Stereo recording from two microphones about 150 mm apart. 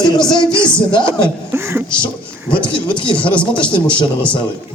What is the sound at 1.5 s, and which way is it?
Speech, 15° right (ahead or behind).